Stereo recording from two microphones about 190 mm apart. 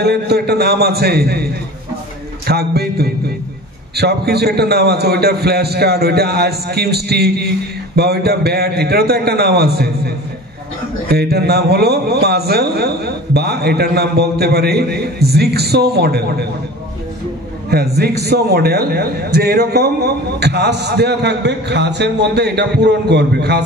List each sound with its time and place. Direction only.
0.0 s a man's voice: 60° right (ahead or behind)
17.6 s a man's voice: 55° right (ahead or behind)